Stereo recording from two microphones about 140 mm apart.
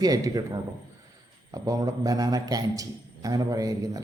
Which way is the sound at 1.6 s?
25° right (ahead or behind).